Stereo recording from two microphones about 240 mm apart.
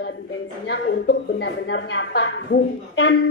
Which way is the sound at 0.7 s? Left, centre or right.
Left.